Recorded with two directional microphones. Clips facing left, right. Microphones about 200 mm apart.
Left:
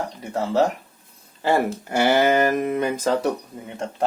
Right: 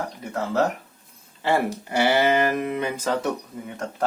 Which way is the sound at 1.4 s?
45° left (ahead or behind).